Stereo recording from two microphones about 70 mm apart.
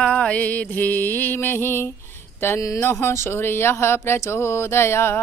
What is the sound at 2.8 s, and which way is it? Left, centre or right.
Speech, left.